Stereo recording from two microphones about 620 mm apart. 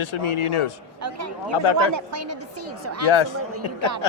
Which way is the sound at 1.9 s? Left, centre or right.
Right.